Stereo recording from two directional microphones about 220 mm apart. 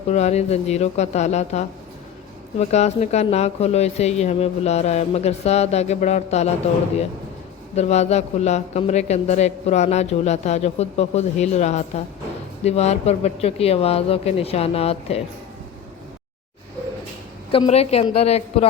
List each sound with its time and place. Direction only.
0.1 s a man's voice: 30° left (ahead or behind)
7.8 s a man's voice: 30° left (ahead or behind)
17.5 s a man's voice: 25° left (ahead or behind)